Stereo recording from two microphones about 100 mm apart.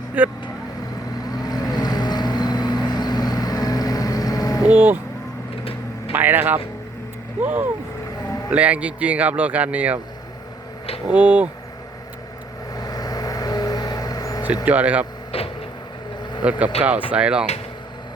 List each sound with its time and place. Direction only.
0.2 s speech: 15° right (ahead or behind)
1.2 s vehicle: 40° left (ahead or behind)
4.7 s speech: 20° right (ahead or behind)
6.1 s speech: 20° right (ahead or behind)
11.1 s speech: 15° right (ahead or behind)
12.7 s vehicle: 40° left (ahead or behind)
14.4 s speech: 15° right (ahead or behind)
15.3 s vehicle: 70° left (ahead or behind)
16.4 s speech: 10° right (ahead or behind)